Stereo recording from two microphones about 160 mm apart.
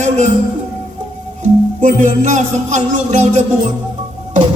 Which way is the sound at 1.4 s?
50° right (ahead or behind).